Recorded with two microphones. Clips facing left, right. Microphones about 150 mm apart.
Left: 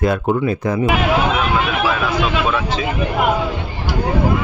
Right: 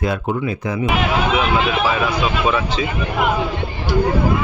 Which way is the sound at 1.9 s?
5° right (ahead or behind).